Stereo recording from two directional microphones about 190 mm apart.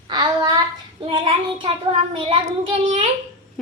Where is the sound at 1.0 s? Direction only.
30° right (ahead or behind).